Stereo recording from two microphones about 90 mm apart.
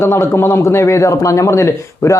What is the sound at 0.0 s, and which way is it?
Speech, 30° left (ahead or behind).